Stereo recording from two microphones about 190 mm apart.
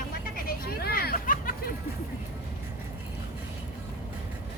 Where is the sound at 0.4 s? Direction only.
50° left (ahead or behind).